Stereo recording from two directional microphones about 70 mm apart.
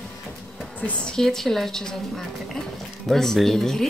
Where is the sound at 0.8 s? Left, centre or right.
Centre.